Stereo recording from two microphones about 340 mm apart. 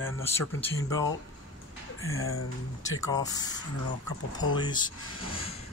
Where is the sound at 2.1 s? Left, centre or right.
Left.